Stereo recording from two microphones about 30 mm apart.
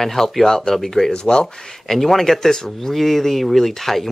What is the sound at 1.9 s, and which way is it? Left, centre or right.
Speech, centre.